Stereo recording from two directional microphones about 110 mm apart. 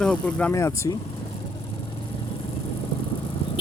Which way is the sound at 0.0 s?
10° left (ahead or behind).